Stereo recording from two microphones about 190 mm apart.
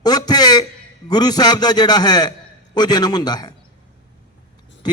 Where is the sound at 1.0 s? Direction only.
20° left (ahead or behind).